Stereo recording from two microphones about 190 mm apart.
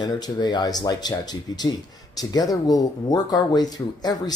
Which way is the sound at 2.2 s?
20° left (ahead or behind).